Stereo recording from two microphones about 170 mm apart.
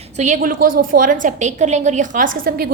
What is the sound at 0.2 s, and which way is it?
A woman's voice, 50° right (ahead or behind).